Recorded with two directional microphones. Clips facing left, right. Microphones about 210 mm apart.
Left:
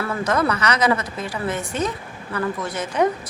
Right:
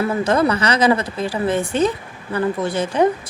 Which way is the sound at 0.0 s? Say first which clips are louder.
Right 4 dB; 25° right (ahead or behind).